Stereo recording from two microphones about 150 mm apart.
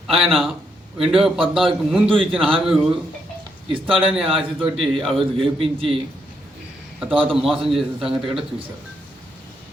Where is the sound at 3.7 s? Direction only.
35° right (ahead or behind).